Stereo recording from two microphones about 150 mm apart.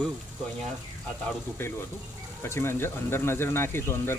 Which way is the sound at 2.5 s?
15° left (ahead or behind).